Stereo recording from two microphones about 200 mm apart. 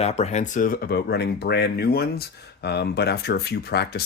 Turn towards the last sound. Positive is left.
turn(degrees=55)  # may be behind; listen again after turning